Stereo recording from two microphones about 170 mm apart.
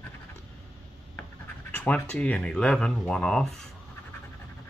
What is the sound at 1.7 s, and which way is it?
Speech, 10° left (ahead or behind).